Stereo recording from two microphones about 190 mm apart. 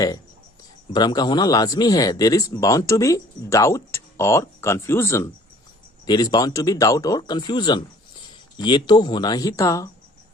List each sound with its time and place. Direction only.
0.9 s speech: 20° left (ahead or behind)